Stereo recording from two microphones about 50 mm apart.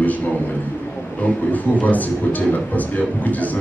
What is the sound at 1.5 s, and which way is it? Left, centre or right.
Speech, left.